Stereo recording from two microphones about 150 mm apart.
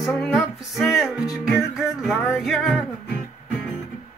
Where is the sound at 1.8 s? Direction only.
Centre (ahead or behind).